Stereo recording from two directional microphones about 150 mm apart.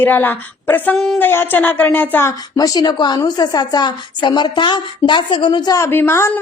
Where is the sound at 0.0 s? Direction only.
10° left (ahead or behind).